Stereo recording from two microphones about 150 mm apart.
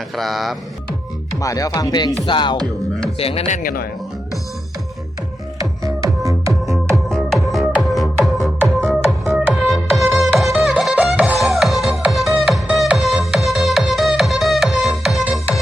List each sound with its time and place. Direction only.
0.2 s speech: centre (ahead or behind)
1.4 s speech: 25° left (ahead or behind)
2.2 s music: 30° left (ahead or behind)
3.4 s speech: 65° left (ahead or behind)
5.5 s music: 20° right (ahead or behind)
6.9 s music: centre (ahead or behind)